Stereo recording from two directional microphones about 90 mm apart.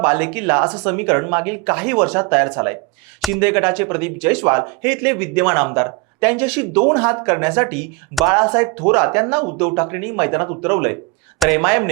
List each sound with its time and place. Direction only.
0.0 s speech: 20° right (ahead or behind)
3.2 s a sound: centre (ahead or behind)
3.4 s speech: 15° right (ahead or behind)